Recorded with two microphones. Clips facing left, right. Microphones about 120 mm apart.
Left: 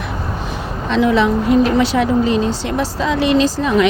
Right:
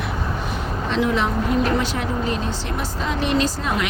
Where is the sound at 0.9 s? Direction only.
90° left.